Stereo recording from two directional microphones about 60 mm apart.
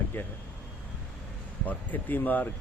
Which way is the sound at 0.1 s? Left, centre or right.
Left.